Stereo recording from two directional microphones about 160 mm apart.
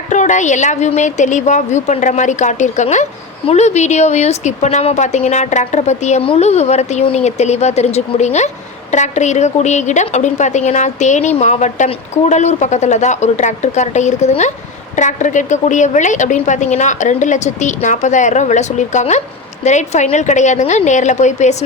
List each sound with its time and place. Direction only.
0.1 s a woman's voice: 50° left (ahead or behind)